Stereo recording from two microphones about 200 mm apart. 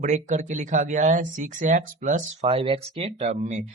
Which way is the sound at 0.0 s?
35° right (ahead or behind).